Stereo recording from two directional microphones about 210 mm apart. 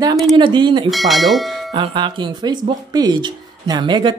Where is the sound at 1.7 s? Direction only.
20° right (ahead or behind).